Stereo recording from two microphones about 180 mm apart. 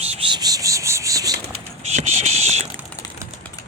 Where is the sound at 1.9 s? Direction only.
40° right (ahead or behind).